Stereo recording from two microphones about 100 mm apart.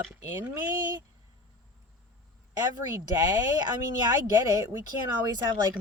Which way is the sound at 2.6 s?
35° right (ahead or behind).